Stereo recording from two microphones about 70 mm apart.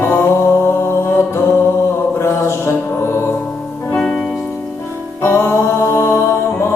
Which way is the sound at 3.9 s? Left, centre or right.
Centre.